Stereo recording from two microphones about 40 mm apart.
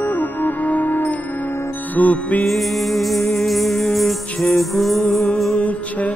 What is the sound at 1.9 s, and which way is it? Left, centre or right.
Music, left.